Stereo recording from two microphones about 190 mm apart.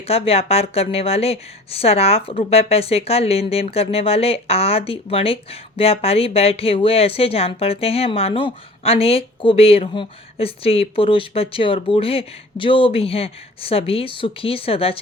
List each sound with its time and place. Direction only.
0.0 s speech: 30° left (ahead or behind)